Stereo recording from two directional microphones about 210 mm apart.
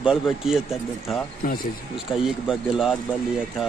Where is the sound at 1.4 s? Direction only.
40° left (ahead or behind).